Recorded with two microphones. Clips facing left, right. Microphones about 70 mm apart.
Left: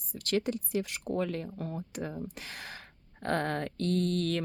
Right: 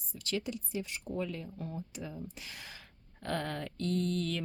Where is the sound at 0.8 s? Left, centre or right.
Left.